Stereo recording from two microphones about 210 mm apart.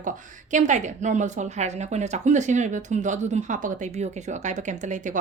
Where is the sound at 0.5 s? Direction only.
35° right (ahead or behind).